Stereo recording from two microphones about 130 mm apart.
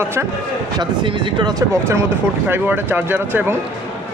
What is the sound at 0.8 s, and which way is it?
A man's voice, 35° right (ahead or behind).